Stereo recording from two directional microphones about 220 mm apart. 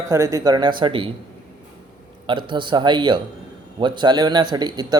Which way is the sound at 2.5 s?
20° right (ahead or behind).